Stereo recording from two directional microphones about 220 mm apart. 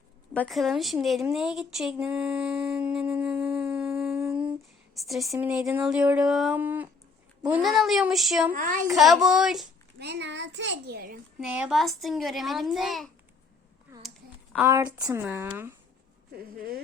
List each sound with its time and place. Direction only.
0.3 s a woman's voice: centre (ahead or behind)
4.2 s humming: 5° right (ahead or behind)
4.9 s a woman's voice: centre (ahead or behind)
10.0 s a child's voice: 50° right (ahead or behind)
11.3 s a woman's voice: 5° right (ahead or behind)
14.5 s speech: 10° right (ahead or behind)